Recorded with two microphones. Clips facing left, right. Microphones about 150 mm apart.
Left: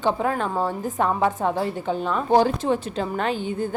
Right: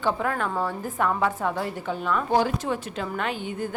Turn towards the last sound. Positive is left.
turn(degrees=30)  # may be behind; listen again after turning